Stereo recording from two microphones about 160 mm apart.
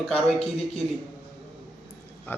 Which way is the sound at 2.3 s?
10° left (ahead or behind).